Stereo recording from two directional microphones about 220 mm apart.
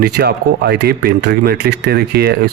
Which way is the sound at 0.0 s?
45° right (ahead or behind).